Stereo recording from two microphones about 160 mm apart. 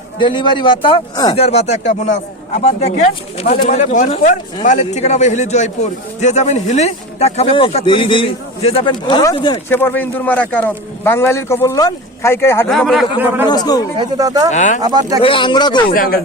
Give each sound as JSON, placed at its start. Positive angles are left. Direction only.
{"t": 0.2, "sound": "a man's voice", "side_deg": 30}
{"t": 1.4, "sound": "a man's voice", "side_deg": 40}
{"t": 9.6, "sound": "speech", "side_deg": 10}
{"t": 12.6, "sound": "speech", "side_deg": 0}
{"t": 13.2, "sound": "a man's voice", "side_deg": -15}
{"t": 13.5, "sound": "a man's voice", "side_deg": 25}
{"t": 13.9, "sound": "speech", "side_deg": -25}
{"t": 14.5, "sound": "a man's voice", "side_deg": 50}
{"t": 14.8, "sound": "speech", "side_deg": -25}
{"t": 15.2, "sound": "speech", "side_deg": 30}
{"t": 15.9, "sound": "speech", "side_deg": 65}